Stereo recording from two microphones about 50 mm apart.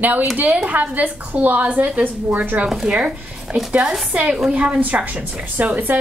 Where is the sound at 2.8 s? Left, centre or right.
Right.